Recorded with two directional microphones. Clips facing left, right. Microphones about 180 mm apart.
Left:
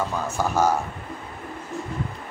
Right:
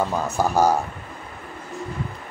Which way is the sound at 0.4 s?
40° right (ahead or behind).